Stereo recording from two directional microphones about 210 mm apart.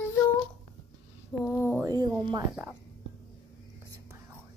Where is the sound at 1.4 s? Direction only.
Centre (ahead or behind).